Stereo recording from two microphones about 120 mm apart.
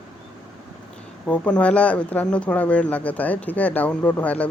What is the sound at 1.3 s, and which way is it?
Speech, 10° left (ahead or behind).